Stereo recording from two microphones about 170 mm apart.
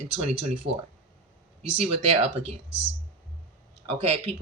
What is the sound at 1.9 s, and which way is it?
Speech, 35° right (ahead or behind).